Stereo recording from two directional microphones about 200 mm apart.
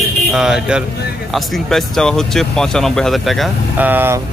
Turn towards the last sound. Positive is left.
turn(degrees=-10)  # may be behind; listen again after turning